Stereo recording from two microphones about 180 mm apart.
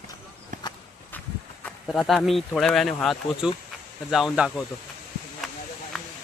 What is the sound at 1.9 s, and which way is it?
Speech, centre (ahead or behind).